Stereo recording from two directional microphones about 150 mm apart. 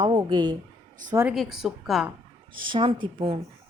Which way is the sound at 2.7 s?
35° right (ahead or behind).